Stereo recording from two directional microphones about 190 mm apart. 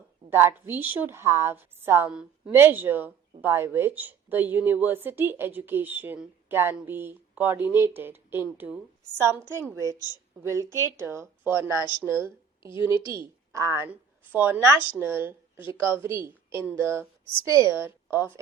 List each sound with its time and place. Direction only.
0.3 s a woman's voice: 10° right (ahead or behind)
12.7 s a woman's voice: 25° left (ahead or behind)
13.1 s a woman's voice: 15° right (ahead or behind)